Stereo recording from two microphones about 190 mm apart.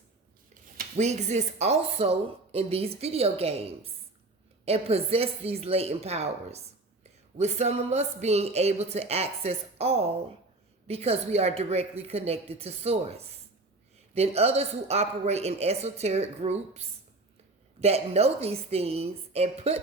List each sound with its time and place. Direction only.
0.8 s speech: 35° right (ahead or behind)